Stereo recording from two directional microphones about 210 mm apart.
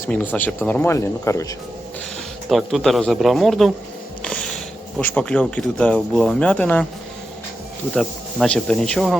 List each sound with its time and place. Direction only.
0.1 s speech: 5° left (ahead or behind)
2.5 s a man's voice: centre (ahead or behind)
7.9 s a man's voice: 5° left (ahead or behind)